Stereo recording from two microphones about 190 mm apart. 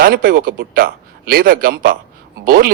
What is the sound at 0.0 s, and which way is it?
Speech, 50° right (ahead or behind).